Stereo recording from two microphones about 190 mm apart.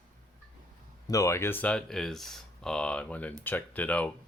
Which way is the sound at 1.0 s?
15° left (ahead or behind).